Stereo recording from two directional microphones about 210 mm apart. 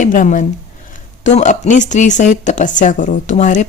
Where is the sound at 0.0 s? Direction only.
40° left (ahead or behind).